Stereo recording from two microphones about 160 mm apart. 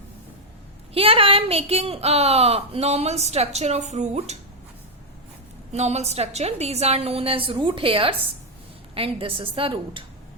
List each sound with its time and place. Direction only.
0.9 s speech: 35° right (ahead or behind)
5.7 s speech: 45° right (ahead or behind)